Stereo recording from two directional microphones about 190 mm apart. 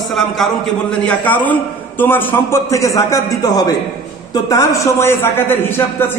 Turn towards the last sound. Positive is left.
turn(degrees=10)  # may be behind; listen again after turning